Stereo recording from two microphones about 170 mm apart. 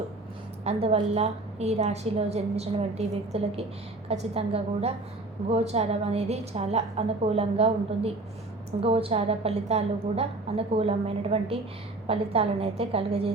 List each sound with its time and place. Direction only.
0.6 s a woman's voice: 35° right (ahead or behind)